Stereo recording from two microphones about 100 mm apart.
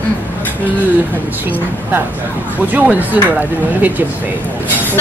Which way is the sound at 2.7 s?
15° right (ahead or behind).